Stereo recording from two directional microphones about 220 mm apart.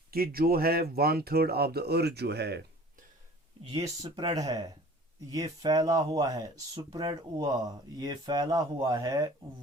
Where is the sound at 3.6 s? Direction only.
20° right (ahead or behind).